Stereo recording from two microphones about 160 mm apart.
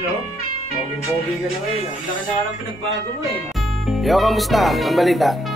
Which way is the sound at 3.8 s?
Centre (ahead or behind).